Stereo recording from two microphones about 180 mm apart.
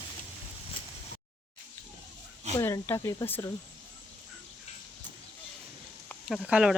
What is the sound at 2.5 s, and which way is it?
Speech, 15° left (ahead or behind).